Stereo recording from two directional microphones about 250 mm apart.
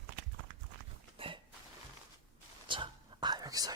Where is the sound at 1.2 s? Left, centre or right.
Right.